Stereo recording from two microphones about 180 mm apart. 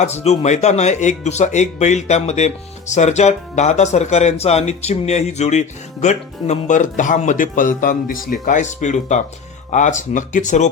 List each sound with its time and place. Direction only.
0.0 s speech: 35° left (ahead or behind)